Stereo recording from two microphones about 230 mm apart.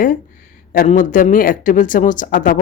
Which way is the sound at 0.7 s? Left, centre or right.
Left.